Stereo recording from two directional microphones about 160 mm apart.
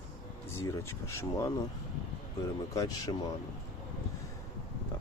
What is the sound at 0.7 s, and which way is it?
Speech, 15° left (ahead or behind).